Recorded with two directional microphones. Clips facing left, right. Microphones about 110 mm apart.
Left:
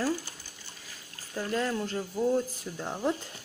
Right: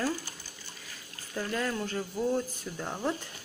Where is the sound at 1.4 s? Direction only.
15° left (ahead or behind).